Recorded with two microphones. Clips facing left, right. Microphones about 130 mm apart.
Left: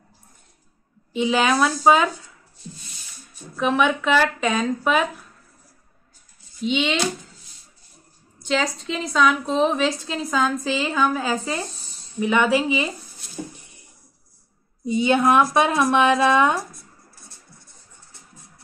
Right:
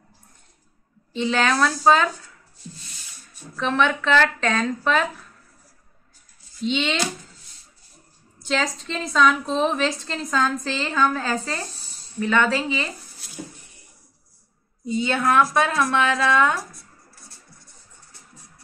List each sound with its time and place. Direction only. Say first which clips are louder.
1.1 s a woman's voice: left 2 dB; 10° left (ahead or behind)
3.5 s a woman's voice: left 2 dB; 10° left (ahead or behind)
6.6 s a woman's voice: left 2 dB; 5° left (ahead or behind)
8.4 s a woman's voice: left 2 dB; centre (ahead or behind)
14.9 s a woman's voice: left 4 dB; 20° left (ahead or behind)